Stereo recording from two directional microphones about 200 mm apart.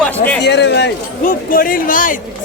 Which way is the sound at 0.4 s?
60° left (ahead or behind).